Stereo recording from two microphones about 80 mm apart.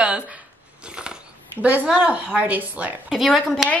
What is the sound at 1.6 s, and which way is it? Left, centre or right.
A woman's voice, centre.